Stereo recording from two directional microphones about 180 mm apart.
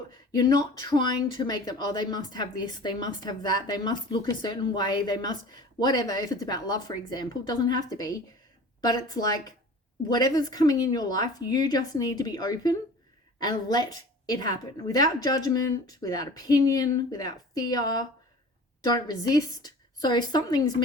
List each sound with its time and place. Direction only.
0.3 s a woman's voice: 20° left (ahead or behind)